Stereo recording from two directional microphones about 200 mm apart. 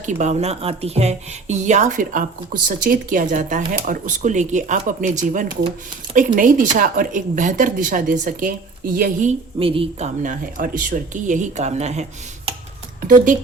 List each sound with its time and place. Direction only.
0.0 s speech: 35° right (ahead or behind)
9.6 s speech: 25° right (ahead or behind)
10.2 s speech: 45° right (ahead or behind)